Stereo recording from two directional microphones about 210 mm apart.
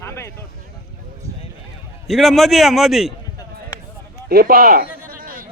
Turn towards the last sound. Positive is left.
turn(degrees=-40)  # may be behind; listen again after turning